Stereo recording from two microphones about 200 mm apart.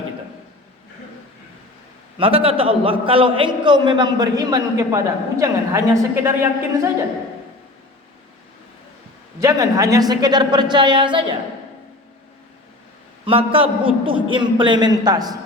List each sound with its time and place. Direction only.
2.1 s a man's voice: 25° right (ahead or behind); by 6.9 s 10° right (ahead or behind)
9.4 s a man's voice: 15° right (ahead or behind)
13.2 s a man's voice: 25° right (ahead or behind)